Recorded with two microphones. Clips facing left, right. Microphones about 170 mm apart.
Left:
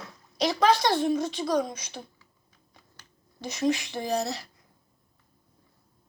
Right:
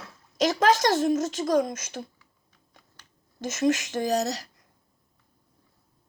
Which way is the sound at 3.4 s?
45° right (ahead or behind).